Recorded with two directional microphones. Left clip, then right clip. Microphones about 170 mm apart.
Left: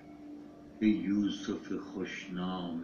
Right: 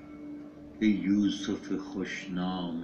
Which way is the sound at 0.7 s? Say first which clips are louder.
Right 3 dB; 45° right (ahead or behind).